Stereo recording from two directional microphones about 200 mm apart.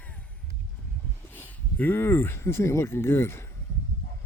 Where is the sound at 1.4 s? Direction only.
10° left (ahead or behind).